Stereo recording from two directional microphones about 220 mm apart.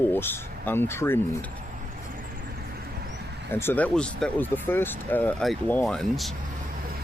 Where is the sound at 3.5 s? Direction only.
10° left (ahead or behind).